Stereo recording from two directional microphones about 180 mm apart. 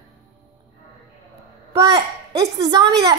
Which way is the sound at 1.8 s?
20° right (ahead or behind).